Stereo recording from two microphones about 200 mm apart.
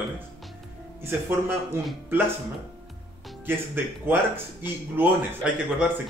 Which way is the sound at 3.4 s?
10° right (ahead or behind).